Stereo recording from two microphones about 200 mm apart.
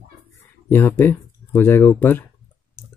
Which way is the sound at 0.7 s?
10° left (ahead or behind).